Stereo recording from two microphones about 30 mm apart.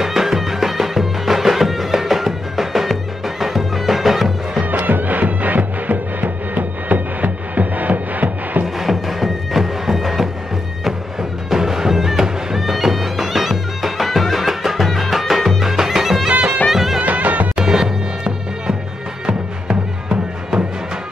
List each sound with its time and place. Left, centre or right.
0.0 s music: centre
4.6 s music: right
8.7 s music: centre
11.5 s music: centre
16.3 s music: right
16.7 s music: centre
17.0 s music: right
17.6 s music: right